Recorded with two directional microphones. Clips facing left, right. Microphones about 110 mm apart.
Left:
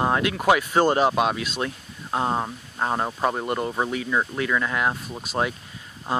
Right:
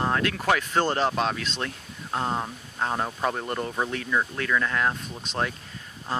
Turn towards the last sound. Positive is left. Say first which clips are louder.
# left 4 dB
turn(degrees=15)  # may be behind; listen again after turning